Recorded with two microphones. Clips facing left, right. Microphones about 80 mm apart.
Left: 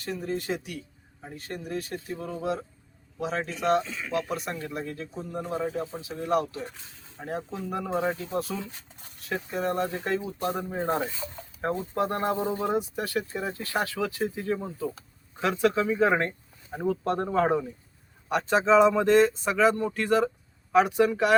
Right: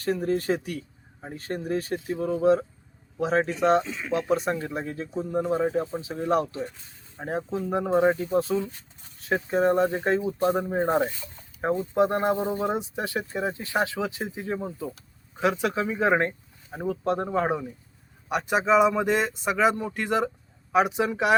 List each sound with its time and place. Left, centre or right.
0.0 s speech: right
3.5 s speech: right
3.8 s speech: centre
4.1 s speech: right